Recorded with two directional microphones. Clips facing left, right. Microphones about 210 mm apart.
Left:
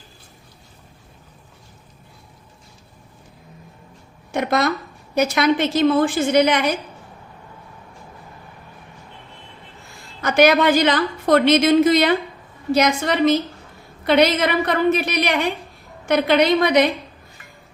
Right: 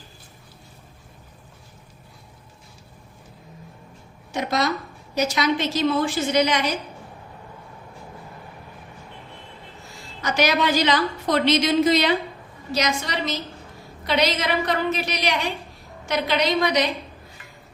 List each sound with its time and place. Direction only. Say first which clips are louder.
4.3 s a woman's voice: left 4 dB; 55° left (ahead or behind)
10.2 s a woman's voice: left 6 dB; 55° left (ahead or behind)